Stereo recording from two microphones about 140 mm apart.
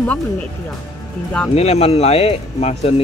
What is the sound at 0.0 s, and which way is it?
Speech, 10° left (ahead or behind).